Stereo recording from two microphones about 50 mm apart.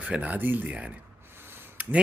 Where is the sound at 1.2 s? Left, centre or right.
Right.